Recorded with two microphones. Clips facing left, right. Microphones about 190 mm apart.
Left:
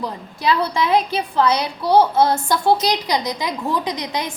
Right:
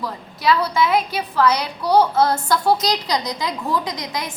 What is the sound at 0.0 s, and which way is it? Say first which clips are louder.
A woman's voice: even; 30° left (ahead or behind).